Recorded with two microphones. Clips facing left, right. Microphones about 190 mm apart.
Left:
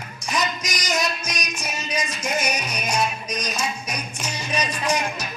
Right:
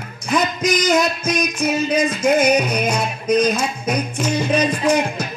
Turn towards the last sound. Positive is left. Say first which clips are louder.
# right 7 dB
turn(degrees=-55)  # may be behind; listen again after turning